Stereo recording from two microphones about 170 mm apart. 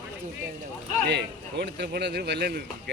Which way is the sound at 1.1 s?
90° right.